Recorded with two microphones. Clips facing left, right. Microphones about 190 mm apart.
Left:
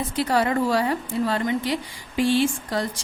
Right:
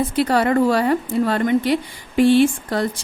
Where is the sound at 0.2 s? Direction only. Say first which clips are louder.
Right 4 dB; 60° right (ahead or behind).